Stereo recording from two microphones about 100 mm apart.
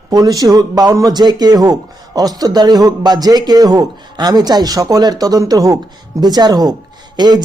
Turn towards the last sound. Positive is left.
turn(degrees=-45)  # may be behind; listen again after turning